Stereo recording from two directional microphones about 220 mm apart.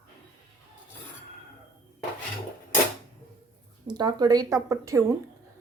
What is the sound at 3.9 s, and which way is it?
Speech, 20° right (ahead or behind).